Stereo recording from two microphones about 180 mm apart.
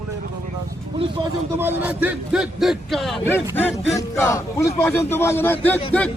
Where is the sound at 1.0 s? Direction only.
30° right (ahead or behind).